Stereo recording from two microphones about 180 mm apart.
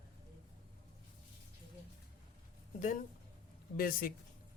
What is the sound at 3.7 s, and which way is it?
Speech, 55° left (ahead or behind).